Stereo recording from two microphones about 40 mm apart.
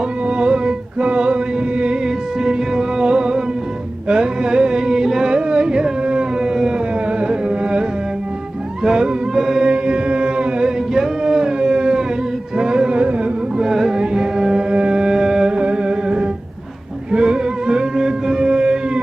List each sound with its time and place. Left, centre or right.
0.3 s music: right
7.2 s carnatic music: right
8.8 s music: centre
9.6 s music: right
11.2 s a sound: centre
12.5 s music: right
13.6 s music: centre
15.5 s music: right